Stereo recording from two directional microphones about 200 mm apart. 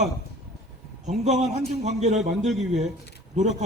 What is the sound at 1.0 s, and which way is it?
A man's voice, 35° right (ahead or behind).